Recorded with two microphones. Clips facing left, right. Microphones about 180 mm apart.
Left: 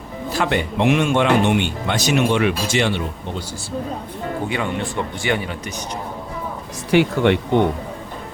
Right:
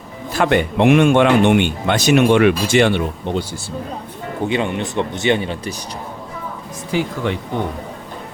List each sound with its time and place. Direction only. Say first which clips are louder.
0.3 s speech: right 5 dB; 55° right (ahead or behind)
4.4 s speech: right 6 dB; 20° right (ahead or behind)
6.9 s speech: left 5 dB; 70° left (ahead or behind)